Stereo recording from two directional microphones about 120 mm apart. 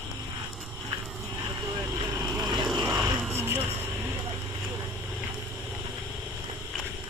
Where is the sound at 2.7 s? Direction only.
30° right (ahead or behind).